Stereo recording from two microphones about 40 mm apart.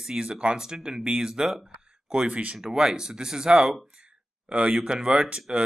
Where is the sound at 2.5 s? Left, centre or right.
Centre.